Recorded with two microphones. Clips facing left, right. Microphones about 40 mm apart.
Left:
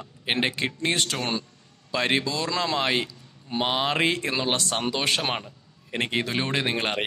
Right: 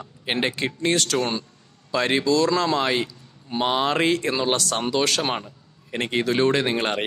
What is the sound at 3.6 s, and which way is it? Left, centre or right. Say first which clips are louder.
Speech: right 3 dB; centre.